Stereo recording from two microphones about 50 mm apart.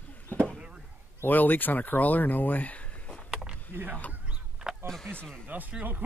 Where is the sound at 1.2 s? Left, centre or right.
Left.